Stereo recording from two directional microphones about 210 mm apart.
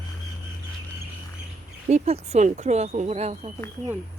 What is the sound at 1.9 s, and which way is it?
Speech, 30° right (ahead or behind).